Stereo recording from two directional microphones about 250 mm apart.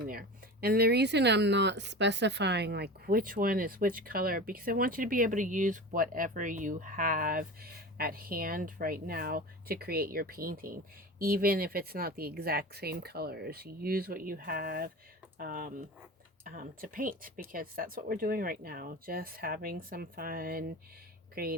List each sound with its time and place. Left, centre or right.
0.0 s speech: right